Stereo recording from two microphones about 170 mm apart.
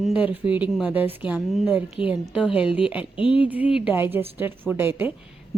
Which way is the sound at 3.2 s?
30° left (ahead or behind).